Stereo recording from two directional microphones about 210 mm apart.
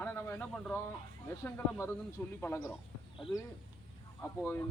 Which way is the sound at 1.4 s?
10° left (ahead or behind).